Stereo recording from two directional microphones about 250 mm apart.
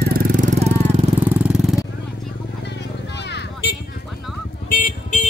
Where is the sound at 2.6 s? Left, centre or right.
Left.